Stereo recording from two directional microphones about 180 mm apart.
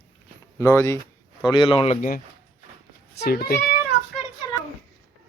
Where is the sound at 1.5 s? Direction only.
25° left (ahead or behind); by 3.6 s 55° left (ahead or behind).